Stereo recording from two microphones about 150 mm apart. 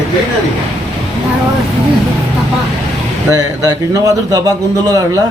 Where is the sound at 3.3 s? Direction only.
25° right (ahead or behind).